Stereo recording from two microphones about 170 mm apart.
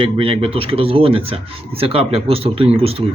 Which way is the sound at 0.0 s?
35° right (ahead or behind).